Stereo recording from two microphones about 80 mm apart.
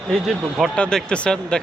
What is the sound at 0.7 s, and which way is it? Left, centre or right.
Speech, centre.